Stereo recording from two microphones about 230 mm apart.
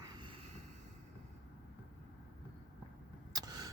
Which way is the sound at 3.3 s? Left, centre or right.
Centre.